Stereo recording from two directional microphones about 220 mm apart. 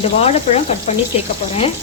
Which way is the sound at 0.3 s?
30° left (ahead or behind).